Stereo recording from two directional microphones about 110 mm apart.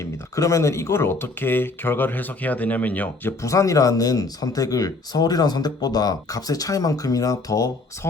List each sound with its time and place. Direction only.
0.0 s speech: 30° left (ahead or behind); by 3.3 s 15° left (ahead or behind)
3.4 s speech: 30° left (ahead or behind)